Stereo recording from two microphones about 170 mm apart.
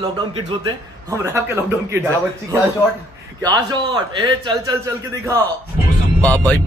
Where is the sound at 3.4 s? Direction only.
25° right (ahead or behind).